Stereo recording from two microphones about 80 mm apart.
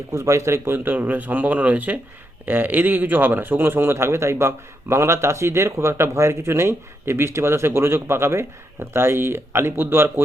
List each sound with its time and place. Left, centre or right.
0.1 s speech: right